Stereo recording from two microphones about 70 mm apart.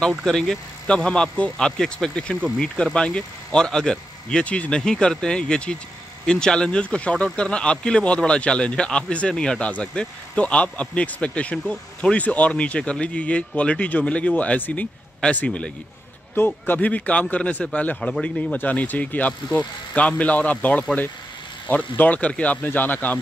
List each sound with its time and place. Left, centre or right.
0.2 s speech: centre; by 23.1 s left